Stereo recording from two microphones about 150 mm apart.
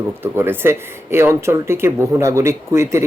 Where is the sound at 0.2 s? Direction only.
15° right (ahead or behind).